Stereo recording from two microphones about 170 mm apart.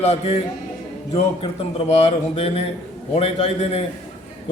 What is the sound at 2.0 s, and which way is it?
A man's voice, 35° left (ahead or behind).